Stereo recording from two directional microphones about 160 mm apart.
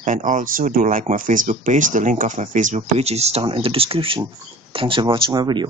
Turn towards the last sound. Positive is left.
turn(degrees=-25)  # may be behind; listen again after turning